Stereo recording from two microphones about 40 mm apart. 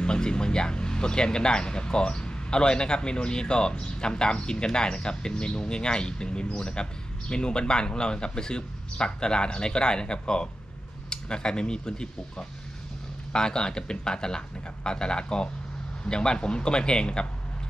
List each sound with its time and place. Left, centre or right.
0.0 s speech: left